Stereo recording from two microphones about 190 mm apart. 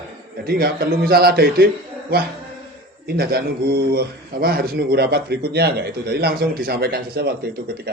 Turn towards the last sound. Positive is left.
turn(degrees=-55)  # may be behind; listen again after turning